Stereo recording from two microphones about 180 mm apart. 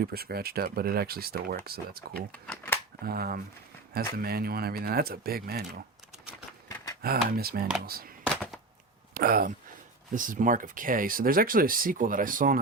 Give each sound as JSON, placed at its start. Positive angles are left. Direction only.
{"t": 0.0, "sound": "speech", "side_deg": -60}
{"t": 2.3, "sound": "speech", "side_deg": 10}
{"t": 3.0, "sound": "speech", "side_deg": -55}
{"t": 6.7, "sound": "a sound", "side_deg": 20}
{"t": 7.0, "sound": "speech", "side_deg": -55}
{"t": 9.1, "sound": "speech", "side_deg": -55}